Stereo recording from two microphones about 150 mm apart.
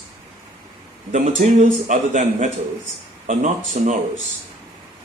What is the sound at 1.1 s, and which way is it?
A man's voice, 55° right (ahead or behind).